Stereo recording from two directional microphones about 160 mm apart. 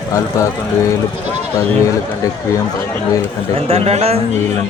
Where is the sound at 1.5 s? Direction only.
20° left (ahead or behind).